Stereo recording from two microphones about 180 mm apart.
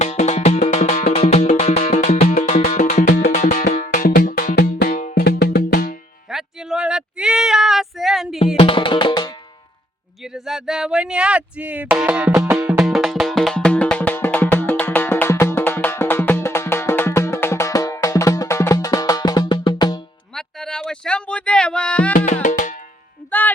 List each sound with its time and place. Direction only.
0.0 s music: 40° left (ahead or behind)
6.3 s female singing: 5° right (ahead or behind)
8.5 s music: 30° left (ahead or behind)
10.2 s music: centre (ahead or behind); by 20.0 s 25° left (ahead or behind)
20.3 s a sound: 5° left (ahead or behind)
22.4 s music: 45° left (ahead or behind)